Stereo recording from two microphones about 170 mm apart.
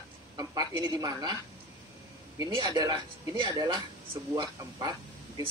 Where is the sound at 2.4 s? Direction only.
25° right (ahead or behind).